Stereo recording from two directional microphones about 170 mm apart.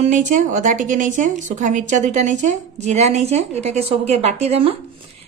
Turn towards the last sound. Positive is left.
turn(degrees=-35)  # may be behind; listen again after turning